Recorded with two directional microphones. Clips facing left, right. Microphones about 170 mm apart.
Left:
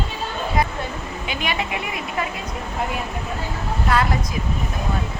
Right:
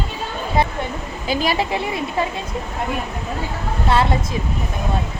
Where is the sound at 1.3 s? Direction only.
35° right (ahead or behind).